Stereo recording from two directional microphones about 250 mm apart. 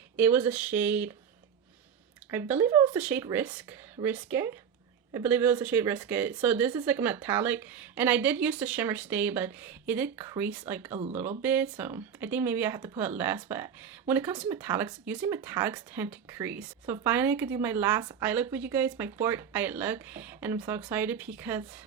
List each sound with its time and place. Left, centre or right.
0.2 s speech: centre
2.3 s speech: centre
10.9 s speech: right
11.2 s speech: centre